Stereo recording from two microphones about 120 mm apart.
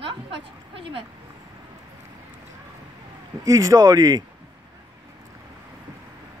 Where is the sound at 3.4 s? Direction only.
30° right (ahead or behind).